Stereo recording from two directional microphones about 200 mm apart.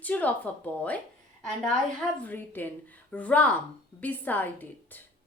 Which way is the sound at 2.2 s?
10° left (ahead or behind).